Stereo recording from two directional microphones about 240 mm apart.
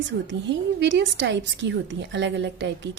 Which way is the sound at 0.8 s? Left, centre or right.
Right.